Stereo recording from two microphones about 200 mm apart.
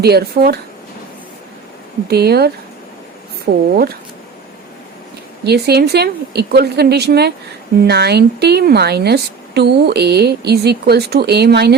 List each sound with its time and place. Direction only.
0.0 s speech: 50° right (ahead or behind)
2.0 s speech: 55° right (ahead or behind)
5.5 s a woman's voice: 55° right (ahead or behind)